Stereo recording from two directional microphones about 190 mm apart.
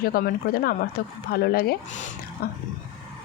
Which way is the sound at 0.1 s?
50° left (ahead or behind).